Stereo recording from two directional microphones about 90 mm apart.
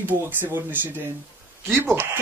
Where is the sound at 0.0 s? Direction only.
20° right (ahead or behind).